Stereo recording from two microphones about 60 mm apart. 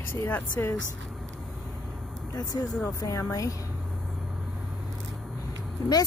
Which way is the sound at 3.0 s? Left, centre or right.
Left.